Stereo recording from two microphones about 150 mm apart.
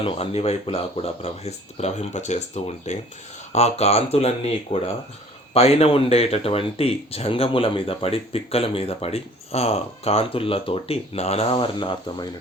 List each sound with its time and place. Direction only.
0.0 s speech: 40° left (ahead or behind)